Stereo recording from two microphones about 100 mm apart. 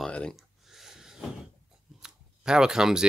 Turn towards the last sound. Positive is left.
turn(degrees=-5)  # may be behind; listen again after turning